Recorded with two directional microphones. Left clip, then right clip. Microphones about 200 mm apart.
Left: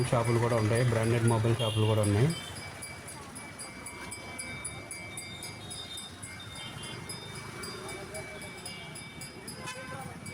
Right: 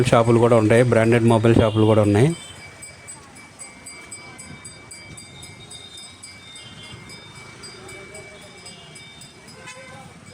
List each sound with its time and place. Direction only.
0.0 s a man's voice: 50° right (ahead or behind)